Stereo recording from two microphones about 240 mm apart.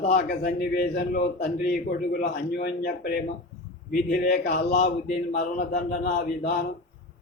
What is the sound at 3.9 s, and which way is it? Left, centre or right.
Speech, left.